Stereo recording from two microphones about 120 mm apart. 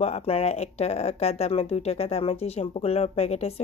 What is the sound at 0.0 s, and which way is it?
Speech, 55° left (ahead or behind).